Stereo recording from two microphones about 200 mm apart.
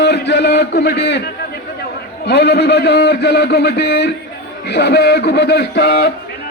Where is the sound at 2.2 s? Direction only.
55° left (ahead or behind).